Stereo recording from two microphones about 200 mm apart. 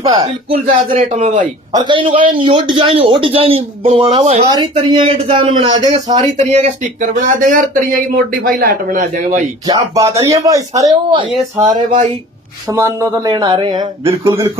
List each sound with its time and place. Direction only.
0.1 s speech: 20° right (ahead or behind)
0.7 s speech: 40° right (ahead or behind)
1.7 s speech: 20° right (ahead or behind)
6.1 s speech: 35° right (ahead or behind)
9.7 s speech: 15° right (ahead or behind)
12.6 s speech: 15° right (ahead or behind)